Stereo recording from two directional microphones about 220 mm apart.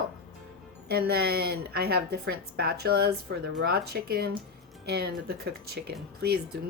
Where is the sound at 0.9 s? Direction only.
45° right (ahead or behind).